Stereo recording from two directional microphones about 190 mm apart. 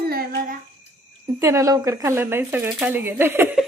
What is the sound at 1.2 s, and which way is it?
Speech, 15° right (ahead or behind).